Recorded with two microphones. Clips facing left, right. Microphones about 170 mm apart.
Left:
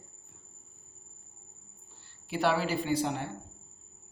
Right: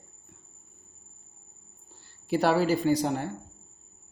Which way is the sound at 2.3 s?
40° right (ahead or behind).